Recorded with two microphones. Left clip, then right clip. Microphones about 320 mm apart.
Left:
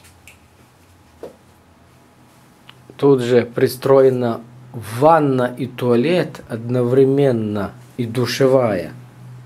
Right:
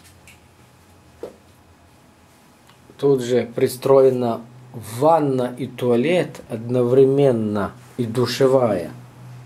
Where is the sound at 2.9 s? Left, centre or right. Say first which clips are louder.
Left 4 dB; centre.